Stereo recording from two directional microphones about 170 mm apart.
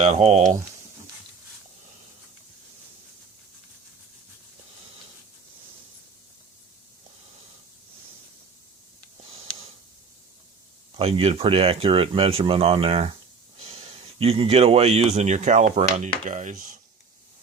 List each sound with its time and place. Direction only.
0.1 s speech: 40° right (ahead or behind)
10.9 s speech: 35° right (ahead or behind)